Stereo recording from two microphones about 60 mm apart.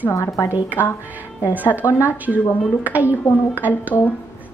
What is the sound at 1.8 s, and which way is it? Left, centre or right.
A woman's voice, right.